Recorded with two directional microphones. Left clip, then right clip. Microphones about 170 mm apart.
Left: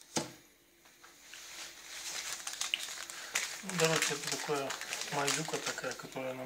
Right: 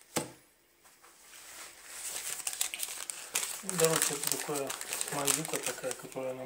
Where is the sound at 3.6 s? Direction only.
15° right (ahead or behind).